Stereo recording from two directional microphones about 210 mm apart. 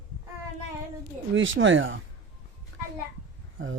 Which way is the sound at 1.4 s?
65° right (ahead or behind).